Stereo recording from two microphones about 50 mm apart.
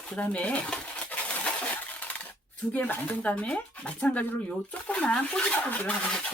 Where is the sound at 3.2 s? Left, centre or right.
Left.